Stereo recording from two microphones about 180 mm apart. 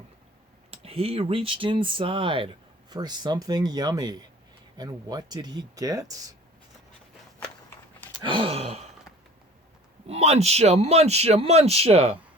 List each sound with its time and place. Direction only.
0.7 s speech: 35° right (ahead or behind)
8.2 s speech: 30° right (ahead or behind)
10.1 s speech: 35° right (ahead or behind)